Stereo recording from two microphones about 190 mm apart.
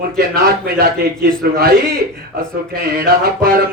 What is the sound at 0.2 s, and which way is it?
A man's voice, 55° right (ahead or behind).